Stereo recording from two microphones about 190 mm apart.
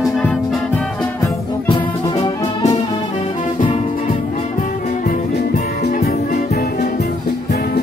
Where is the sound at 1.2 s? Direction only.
20° left (ahead or behind).